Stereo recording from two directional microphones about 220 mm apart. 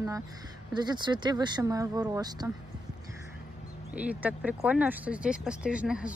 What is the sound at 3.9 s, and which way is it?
Speech, 5° right (ahead or behind).